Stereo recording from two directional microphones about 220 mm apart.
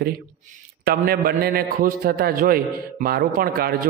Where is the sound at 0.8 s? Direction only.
45° right (ahead or behind).